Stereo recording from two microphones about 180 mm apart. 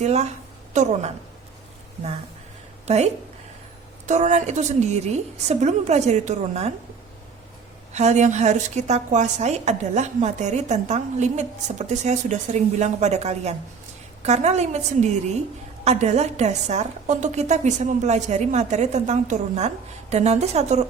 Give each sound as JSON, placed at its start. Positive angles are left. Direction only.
{"t": 0.0, "sound": "a woman's voice", "side_deg": -40}
{"t": 2.8, "sound": "a woman's voice", "side_deg": -35}
{"t": 7.9, "sound": "a woman's voice", "side_deg": -40}